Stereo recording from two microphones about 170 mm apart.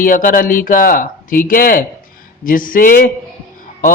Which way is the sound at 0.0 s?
55° left (ahead or behind).